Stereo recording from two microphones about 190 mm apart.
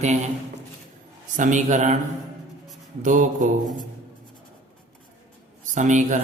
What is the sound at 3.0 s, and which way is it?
Mantra, 45° right (ahead or behind).